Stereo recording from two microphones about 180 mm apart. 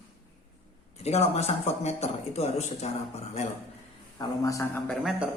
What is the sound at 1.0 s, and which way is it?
Speech, 35° left (ahead or behind).